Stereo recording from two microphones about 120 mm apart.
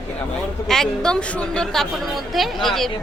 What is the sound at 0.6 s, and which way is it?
A woman's voice, 5° left (ahead or behind).